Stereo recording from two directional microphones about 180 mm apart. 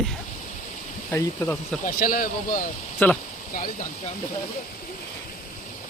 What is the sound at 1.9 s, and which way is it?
Speech, 50° left (ahead or behind).